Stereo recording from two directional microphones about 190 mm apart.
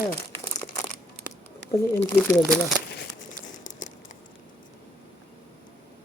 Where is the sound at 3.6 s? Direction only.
40° left (ahead or behind).